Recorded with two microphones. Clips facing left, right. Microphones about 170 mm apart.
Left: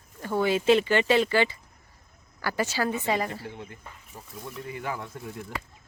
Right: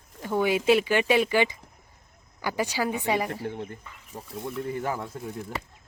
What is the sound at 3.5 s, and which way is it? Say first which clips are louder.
Speech: right 6 dB; 55° right (ahead or behind).